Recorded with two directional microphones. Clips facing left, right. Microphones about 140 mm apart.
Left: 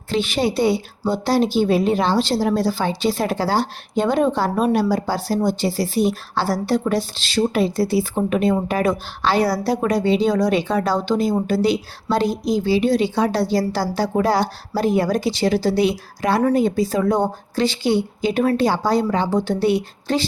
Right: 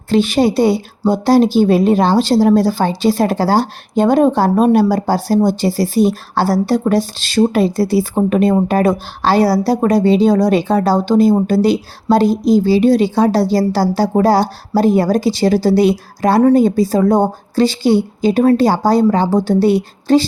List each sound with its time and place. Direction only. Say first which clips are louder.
0.1 s speech: right 7 dB; 40° right (ahead or behind)